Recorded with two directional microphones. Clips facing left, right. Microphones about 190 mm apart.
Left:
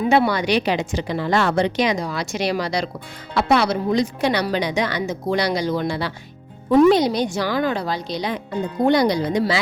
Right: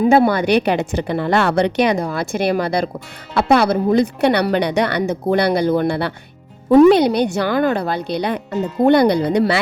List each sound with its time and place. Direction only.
0.0 s a woman's voice: 40° right (ahead or behind); by 9.6 s 60° right (ahead or behind)